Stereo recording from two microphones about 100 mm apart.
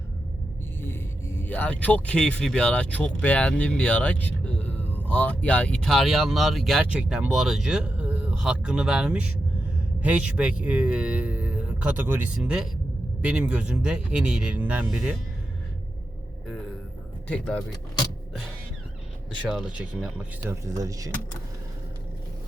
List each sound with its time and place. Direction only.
0.8 s speech: 25° left (ahead or behind); by 12.3 s 20° right (ahead or behind)
12.4 s speech: 10° right (ahead or behind)
17.2 s speech: 10° left (ahead or behind)
19.5 s speech: 10° right (ahead or behind)
20.5 s speech: 30° right (ahead or behind)